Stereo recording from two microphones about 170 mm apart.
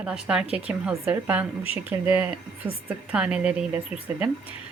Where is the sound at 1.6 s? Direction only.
35° left (ahead or behind).